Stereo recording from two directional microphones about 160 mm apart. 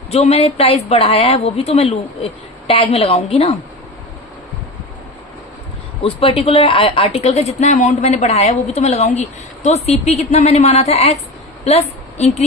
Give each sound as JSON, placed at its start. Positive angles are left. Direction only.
{"t": 0.1, "sound": "a woman's voice", "side_deg": 40}
{"t": 6.0, "sound": "a woman's voice", "side_deg": 40}